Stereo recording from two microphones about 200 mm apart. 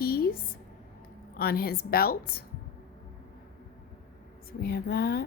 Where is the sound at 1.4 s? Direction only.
50° left (ahead or behind).